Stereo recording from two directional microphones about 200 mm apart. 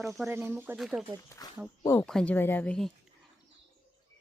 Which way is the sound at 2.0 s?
5° left (ahead or behind).